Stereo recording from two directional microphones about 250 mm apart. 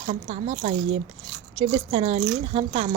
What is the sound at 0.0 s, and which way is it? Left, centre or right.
Speech, right.